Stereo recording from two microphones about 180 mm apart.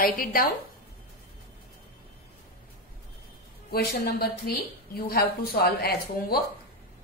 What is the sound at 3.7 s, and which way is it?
Speech, 60° left (ahead or behind).